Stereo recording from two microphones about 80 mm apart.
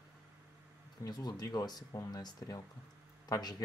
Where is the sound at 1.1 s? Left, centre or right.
Left.